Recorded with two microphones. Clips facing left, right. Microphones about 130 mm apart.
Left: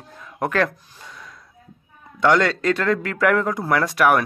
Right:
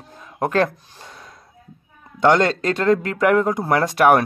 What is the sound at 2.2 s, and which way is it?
A man's voice, 25° right (ahead or behind).